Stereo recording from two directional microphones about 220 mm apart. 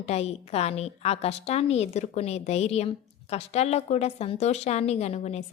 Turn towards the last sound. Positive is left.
turn(degrees=30)  # may be behind; listen again after turning